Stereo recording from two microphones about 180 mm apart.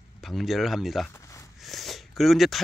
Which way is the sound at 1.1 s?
15° left (ahead or behind).